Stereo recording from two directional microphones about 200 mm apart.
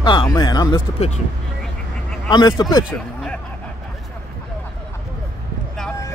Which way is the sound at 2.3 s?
20° left (ahead or behind).